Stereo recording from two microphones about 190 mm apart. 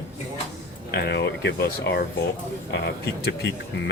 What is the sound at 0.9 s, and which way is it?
Speech, 60° left (ahead or behind).